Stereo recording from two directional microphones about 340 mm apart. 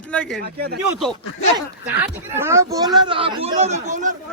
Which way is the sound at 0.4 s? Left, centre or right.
Right.